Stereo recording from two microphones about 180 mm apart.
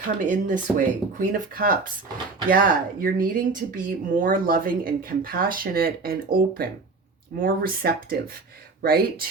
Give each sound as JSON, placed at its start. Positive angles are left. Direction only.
{"t": 0.3, "sound": "speech", "side_deg": -45}